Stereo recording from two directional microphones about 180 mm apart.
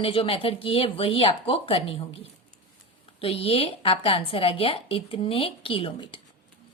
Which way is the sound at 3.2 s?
35° left (ahead or behind).